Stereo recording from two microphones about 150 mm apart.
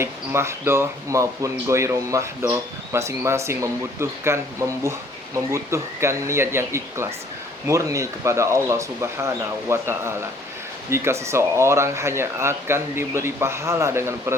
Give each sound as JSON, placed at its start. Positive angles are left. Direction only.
{"t": 0.0, "sound": "speech", "side_deg": -15}